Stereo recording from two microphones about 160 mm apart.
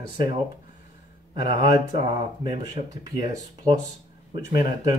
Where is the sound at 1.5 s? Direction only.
25° right (ahead or behind).